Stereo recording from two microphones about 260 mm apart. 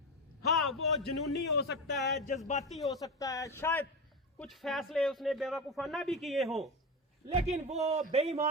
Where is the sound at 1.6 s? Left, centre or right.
Left.